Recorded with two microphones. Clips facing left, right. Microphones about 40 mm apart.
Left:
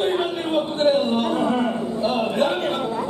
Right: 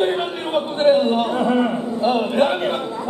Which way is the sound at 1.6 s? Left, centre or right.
Centre.